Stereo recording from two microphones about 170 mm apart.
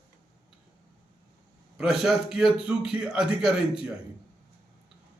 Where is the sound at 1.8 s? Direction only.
Centre (ahead or behind).